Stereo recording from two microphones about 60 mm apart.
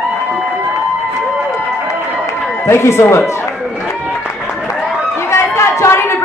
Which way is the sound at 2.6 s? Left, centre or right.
Left.